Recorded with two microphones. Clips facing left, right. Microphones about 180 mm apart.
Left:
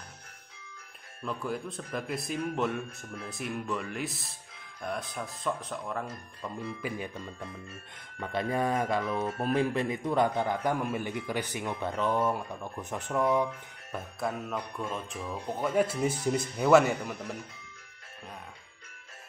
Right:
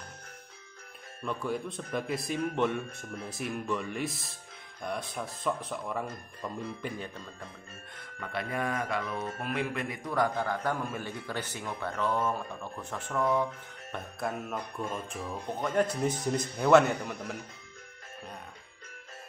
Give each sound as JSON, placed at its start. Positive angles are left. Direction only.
{"t": 1.2, "sound": "speech", "side_deg": 0}
{"t": 8.4, "sound": "speech", "side_deg": 30}
{"t": 13.9, "sound": "speech", "side_deg": 0}